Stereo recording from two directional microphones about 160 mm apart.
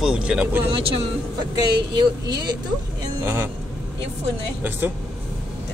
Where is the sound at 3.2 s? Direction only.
15° right (ahead or behind).